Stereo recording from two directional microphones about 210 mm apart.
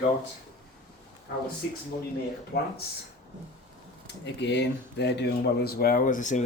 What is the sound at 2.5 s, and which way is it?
Speech, 50° left (ahead or behind).